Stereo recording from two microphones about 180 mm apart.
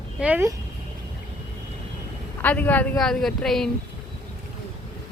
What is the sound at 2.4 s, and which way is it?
Speech, 10° left (ahead or behind).